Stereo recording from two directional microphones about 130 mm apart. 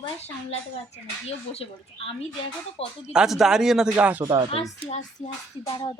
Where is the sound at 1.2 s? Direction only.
50° left (ahead or behind).